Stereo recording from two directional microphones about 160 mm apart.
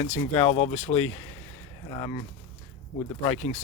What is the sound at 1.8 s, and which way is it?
Speech, 25° left (ahead or behind).